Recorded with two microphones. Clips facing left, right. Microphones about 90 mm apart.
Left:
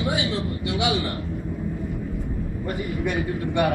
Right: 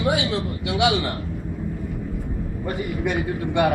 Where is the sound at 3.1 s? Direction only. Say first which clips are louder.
Right 1 dB; 20° right (ahead or behind).